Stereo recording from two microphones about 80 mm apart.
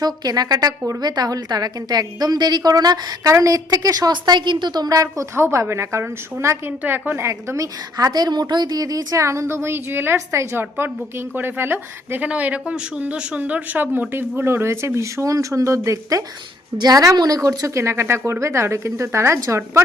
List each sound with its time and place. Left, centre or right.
0.0 s a woman's voice: right
3.3 s a woman's voice: right
5.3 s a woman's voice: right
6.7 s speech: right
7.3 s a woman's voice: right
9.2 s a woman's voice: right
12.3 s speech: centre; by 16.2 s right
16.7 s a woman's voice: right